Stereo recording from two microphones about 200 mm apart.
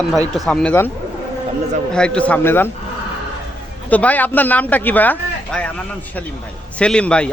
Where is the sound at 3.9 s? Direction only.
5° left (ahead or behind).